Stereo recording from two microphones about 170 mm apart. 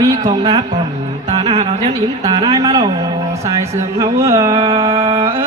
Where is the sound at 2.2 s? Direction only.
25° right (ahead or behind).